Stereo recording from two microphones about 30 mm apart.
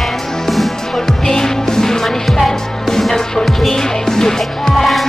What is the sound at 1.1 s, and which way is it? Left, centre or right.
Music, centre.